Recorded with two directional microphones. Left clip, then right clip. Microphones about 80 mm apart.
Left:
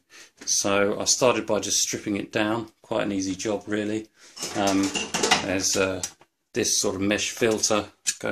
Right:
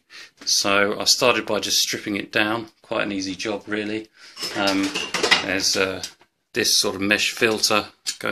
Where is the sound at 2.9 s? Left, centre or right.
Left.